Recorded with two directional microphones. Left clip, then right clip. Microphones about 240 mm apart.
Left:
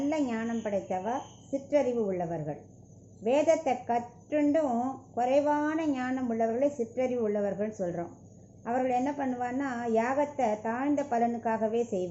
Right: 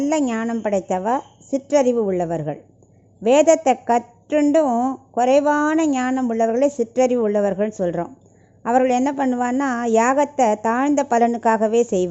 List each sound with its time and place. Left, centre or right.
0.1 s a woman's voice: right